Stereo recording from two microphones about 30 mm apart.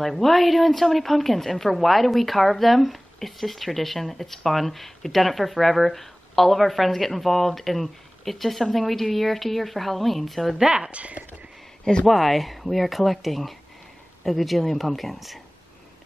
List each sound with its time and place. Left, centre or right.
0.0 s a woman's voice: centre
10.6 s a woman's voice: right
10.9 s speech: right
12.1 s a woman's voice: centre